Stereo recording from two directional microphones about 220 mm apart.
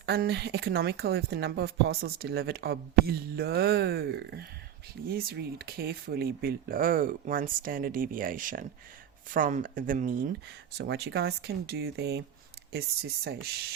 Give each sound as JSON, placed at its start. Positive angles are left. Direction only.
{"t": 0.0, "sound": "speech", "side_deg": -50}
{"t": 10.8, "sound": "speech", "side_deg": -50}